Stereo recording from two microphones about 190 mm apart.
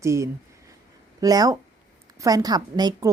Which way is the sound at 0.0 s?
15° right (ahead or behind).